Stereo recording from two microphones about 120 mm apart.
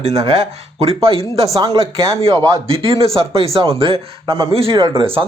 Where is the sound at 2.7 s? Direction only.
50° right (ahead or behind).